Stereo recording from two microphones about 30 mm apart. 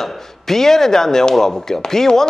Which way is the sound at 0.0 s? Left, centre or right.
Centre.